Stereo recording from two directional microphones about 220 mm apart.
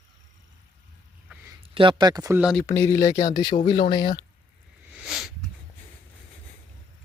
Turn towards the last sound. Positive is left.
turn(degrees=0)  # may be behind; listen again after turning